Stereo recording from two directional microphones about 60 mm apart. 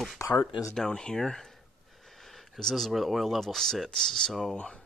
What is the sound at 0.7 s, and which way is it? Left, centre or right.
Speech, centre.